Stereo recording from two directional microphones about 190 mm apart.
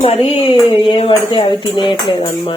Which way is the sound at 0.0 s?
30° left (ahead or behind).